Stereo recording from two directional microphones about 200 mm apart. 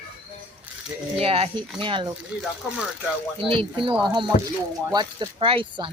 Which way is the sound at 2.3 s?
5° right (ahead or behind).